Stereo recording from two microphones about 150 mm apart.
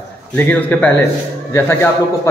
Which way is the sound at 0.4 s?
10° left (ahead or behind).